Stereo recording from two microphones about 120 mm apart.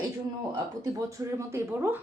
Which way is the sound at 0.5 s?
25° right (ahead or behind).